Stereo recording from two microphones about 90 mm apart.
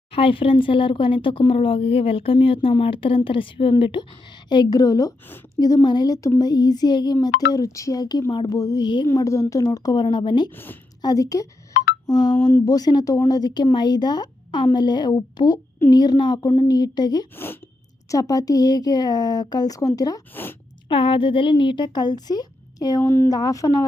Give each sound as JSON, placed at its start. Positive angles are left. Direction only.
{"t": 0.1, "sound": "speech", "side_deg": 85}
{"t": 9.1, "sound": "speech", "side_deg": 40}
{"t": 10.0, "sound": "speech", "side_deg": 60}
{"t": 10.5, "sound": "speech", "side_deg": 25}
{"t": 11.0, "sound": "speech", "side_deg": 40}
{"t": 17.3, "sound": "speech", "side_deg": 25}
{"t": 18.1, "sound": "speech", "side_deg": 45}
{"t": 20.3, "sound": "speech", "side_deg": 25}
{"t": 20.8, "sound": "speech", "side_deg": 70}